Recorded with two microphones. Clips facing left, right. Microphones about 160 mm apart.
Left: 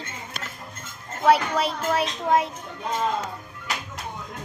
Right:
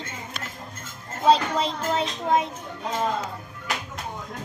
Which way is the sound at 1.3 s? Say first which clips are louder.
Even; 20° right (ahead or behind).